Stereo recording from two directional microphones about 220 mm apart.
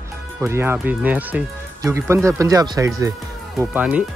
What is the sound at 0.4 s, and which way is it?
Speech, 10° right (ahead or behind).